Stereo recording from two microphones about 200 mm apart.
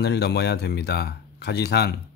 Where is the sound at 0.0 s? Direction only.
55° left (ahead or behind).